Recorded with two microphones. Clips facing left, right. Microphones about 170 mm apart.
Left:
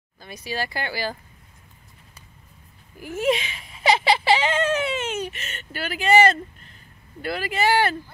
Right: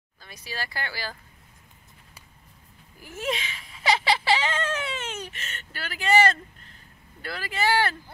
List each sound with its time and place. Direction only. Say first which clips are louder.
0.2 s speech: left 7 dB; 15° left (ahead or behind)
3.2 s baby cry: left 8 dB; 15° left (ahead or behind)
7.2 s speech: left 5 dB; 15° left (ahead or behind)